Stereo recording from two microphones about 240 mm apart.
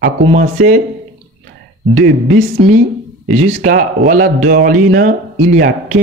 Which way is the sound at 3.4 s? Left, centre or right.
Right.